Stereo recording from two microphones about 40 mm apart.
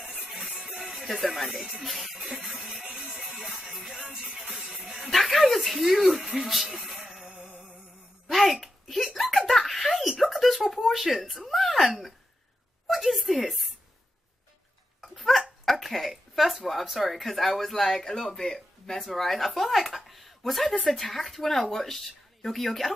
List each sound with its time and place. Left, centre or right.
0.3 s music: centre
0.9 s speech: centre
1.6 s speech: centre
1.9 s speech: centre
2.8 s music: right
3.2 s music: centre
5.1 s speech: centre
6.5 s music: centre
8.3 s a sound: centre
12.9 s a sound: centre
15.0 s dog: centre
15.6 s a woman's voice: centre